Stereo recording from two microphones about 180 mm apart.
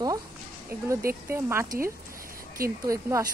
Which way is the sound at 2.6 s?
55° right (ahead or behind).